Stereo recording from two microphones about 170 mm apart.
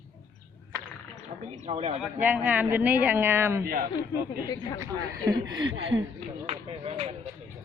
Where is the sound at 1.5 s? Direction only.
40° right (ahead or behind).